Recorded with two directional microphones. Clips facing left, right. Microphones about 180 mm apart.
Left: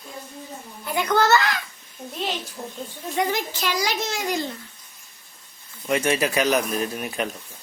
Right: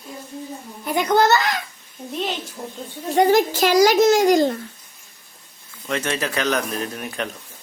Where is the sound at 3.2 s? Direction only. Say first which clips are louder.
Right 9 dB; 40° right (ahead or behind).